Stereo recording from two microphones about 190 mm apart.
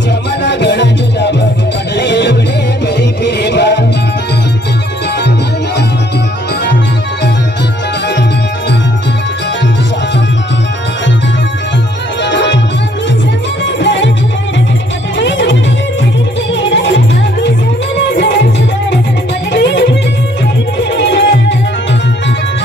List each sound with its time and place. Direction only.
0.4 s music: 65° left (ahead or behind)
8.1 s music: 65° left (ahead or behind)
12.2 s music: 70° left (ahead or behind)
13.7 s music: 70° left (ahead or behind)
15.1 s music: 75° left (ahead or behind)
16.5 s music: 70° left (ahead or behind)